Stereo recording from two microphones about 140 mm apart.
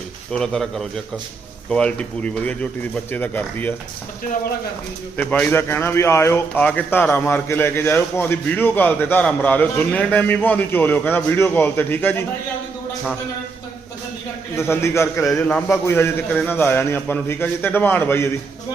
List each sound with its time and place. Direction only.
0.3 s a man's voice: 5° left (ahead or behind)
5.1 s a man's voice: 10° left (ahead or behind)
14.5 s a man's voice: 15° left (ahead or behind)